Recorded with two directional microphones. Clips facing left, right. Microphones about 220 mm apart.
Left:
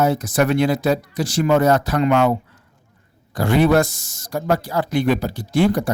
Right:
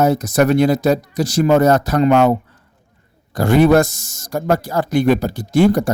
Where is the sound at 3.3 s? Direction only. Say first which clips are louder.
Right 4 dB; 45° right (ahead or behind).